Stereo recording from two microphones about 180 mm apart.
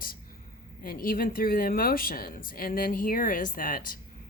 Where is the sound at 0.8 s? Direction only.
50° left (ahead or behind).